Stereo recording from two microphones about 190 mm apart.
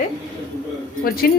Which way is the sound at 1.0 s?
50° left (ahead or behind).